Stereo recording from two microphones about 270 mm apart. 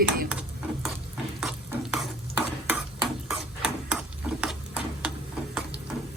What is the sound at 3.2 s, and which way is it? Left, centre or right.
Tick-tock, centre.